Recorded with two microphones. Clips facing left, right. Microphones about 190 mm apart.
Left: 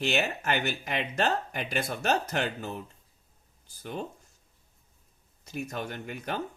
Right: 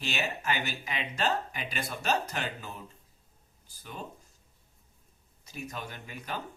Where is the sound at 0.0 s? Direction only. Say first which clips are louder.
Left 5 dB; 60° left (ahead or behind).